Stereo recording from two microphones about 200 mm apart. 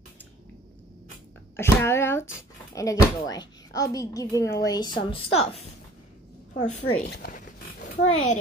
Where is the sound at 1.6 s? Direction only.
10° left (ahead or behind); by 5.5 s 30° left (ahead or behind).